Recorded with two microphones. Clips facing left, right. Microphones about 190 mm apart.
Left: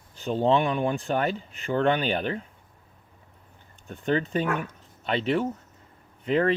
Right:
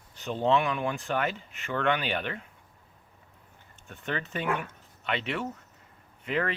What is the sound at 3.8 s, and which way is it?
Speech, 35° left (ahead or behind).